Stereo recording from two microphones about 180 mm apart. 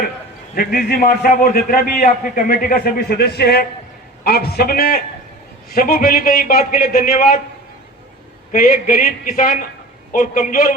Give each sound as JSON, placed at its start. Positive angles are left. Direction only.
{"t": 0.5, "sound": "a man's voice", "side_deg": 55}
{"t": 8.5, "sound": "a man's voice", "side_deg": 50}